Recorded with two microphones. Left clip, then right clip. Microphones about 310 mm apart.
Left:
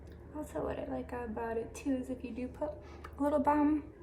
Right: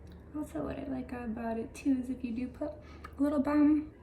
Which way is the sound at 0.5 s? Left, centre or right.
Centre.